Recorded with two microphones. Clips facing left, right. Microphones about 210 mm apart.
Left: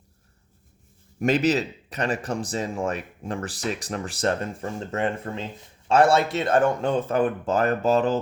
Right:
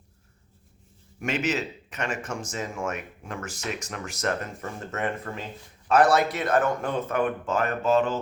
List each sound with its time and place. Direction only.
1.2 s speech: 35° left (ahead or behind)